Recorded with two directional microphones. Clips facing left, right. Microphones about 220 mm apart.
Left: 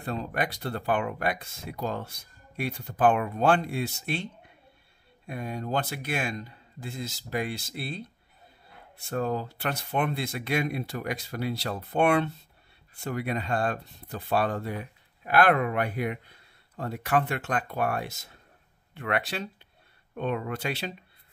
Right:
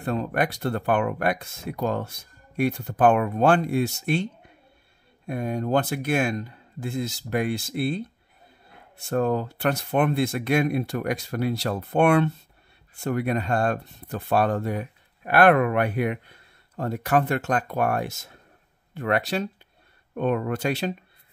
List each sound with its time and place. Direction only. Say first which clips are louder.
0.0 s speech: right 5 dB; 55° right (ahead or behind)
9.1 s speech: right 6 dB; 55° right (ahead or behind)
16.7 s speech: right 4 dB; 45° right (ahead or behind)